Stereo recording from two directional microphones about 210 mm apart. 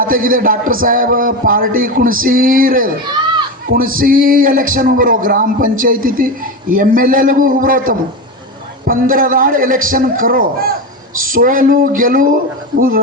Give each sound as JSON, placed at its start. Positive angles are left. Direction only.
{"t": 0.0, "sound": "a man's voice", "side_deg": -40}